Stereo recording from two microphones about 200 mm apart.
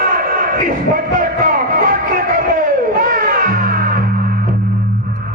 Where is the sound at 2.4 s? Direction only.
45° right (ahead or behind).